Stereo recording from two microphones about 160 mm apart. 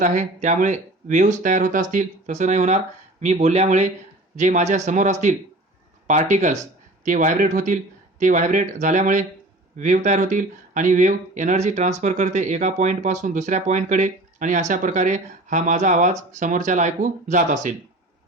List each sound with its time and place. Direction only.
0.0 s speech: 50° right (ahead or behind)